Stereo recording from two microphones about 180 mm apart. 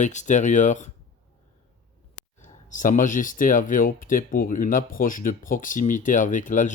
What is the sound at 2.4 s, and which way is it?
Speech, 45° left (ahead or behind).